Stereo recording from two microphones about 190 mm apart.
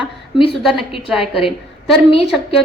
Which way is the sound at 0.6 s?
Centre (ahead or behind).